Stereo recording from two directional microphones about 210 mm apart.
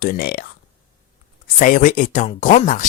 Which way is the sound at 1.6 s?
40° left (ahead or behind).